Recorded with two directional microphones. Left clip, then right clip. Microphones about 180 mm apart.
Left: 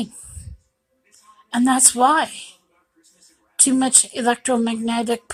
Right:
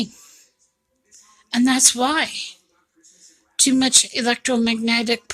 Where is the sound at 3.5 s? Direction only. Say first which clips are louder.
Right 2 dB; 15° right (ahead or behind).